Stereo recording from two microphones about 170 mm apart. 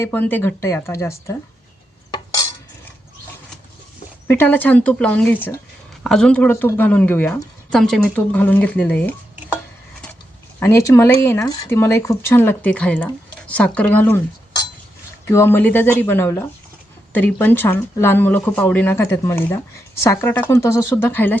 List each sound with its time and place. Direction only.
0.0 s speech: 10° left (ahead or behind)
2.0 s cutlery: 25° left (ahead or behind)
4.3 s speech: 10° left (ahead or behind)
10.6 s speech: 15° left (ahead or behind)
15.3 s speech: 15° left (ahead or behind)